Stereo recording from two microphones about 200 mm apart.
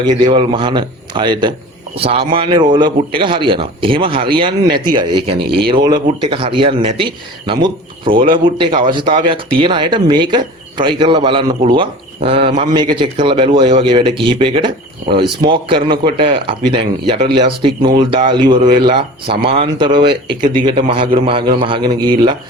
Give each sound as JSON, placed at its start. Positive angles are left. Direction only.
{"t": 0.2, "sound": "speech", "side_deg": -25}